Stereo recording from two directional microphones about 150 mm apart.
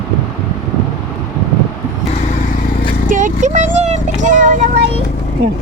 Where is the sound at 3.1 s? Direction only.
60° right (ahead or behind).